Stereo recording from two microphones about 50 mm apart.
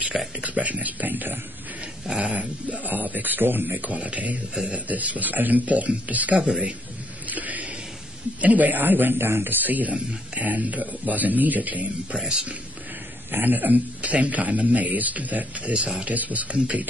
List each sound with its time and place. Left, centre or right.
0.4 s speech: right
2.0 s speech: right
3.9 s speech: right
6.4 s speech: centre
7.2 s a sound: right
8.4 s speech: right
12.2 s speech: centre
13.3 s speech: right
16.5 s speech: right